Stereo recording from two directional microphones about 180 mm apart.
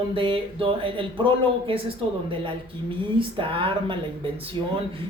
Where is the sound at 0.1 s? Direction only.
30° right (ahead or behind).